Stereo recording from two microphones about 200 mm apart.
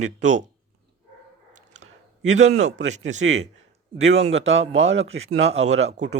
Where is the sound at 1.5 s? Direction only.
35° right (ahead or behind).